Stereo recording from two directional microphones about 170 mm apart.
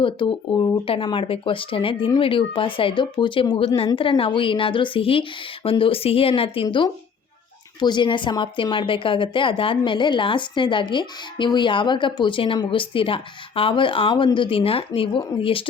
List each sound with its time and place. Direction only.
0.0 s a woman's voice: 30° left (ahead or behind)